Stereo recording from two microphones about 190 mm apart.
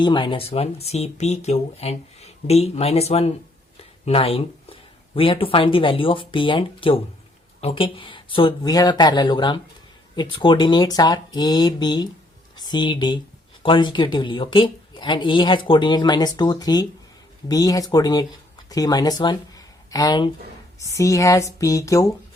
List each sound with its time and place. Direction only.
0.0 s speech: 25° left (ahead or behind)